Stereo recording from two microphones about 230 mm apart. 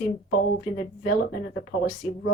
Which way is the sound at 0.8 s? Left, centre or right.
Left.